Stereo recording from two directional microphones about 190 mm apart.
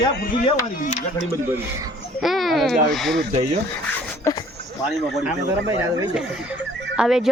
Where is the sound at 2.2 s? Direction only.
Centre (ahead or behind).